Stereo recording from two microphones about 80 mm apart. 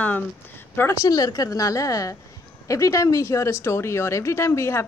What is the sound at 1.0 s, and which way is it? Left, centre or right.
A woman's voice, left.